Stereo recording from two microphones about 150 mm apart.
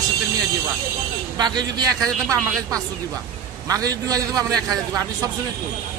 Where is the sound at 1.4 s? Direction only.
30° right (ahead or behind).